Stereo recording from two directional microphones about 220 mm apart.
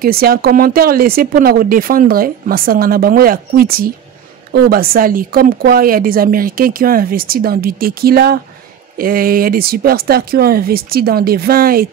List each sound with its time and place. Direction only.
0.0 s speech: 45° right (ahead or behind)